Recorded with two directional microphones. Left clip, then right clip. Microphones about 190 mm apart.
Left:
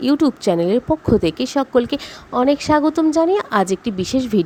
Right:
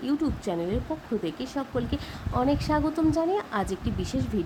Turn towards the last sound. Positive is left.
turn(degrees=45)  # may be behind; listen again after turning